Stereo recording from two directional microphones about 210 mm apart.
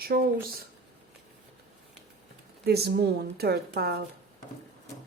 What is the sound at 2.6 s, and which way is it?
Speech, 50° right (ahead or behind).